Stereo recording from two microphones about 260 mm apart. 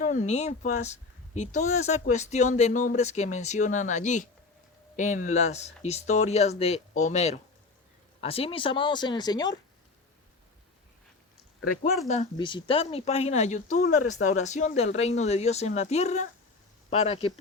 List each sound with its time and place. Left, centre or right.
0.0 s speech: left
12.0 s speech: left